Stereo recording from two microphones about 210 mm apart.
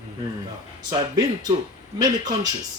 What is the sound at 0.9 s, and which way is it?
Speech, 20° right (ahead or behind).